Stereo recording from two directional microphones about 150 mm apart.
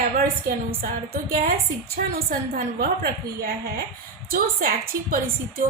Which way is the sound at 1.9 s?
85° right.